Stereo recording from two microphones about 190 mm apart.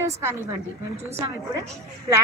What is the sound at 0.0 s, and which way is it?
Speech, 15° right (ahead or behind).